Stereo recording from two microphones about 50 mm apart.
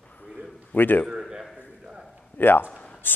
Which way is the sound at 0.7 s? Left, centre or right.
Left.